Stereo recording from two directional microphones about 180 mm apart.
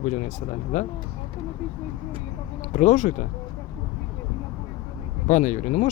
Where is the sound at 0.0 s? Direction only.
45° left (ahead or behind).